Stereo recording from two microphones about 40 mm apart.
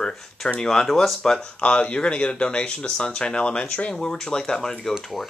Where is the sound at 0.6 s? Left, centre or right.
Centre.